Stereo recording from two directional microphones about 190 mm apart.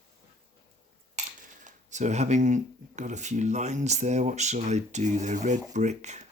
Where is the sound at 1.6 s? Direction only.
40° right (ahead or behind).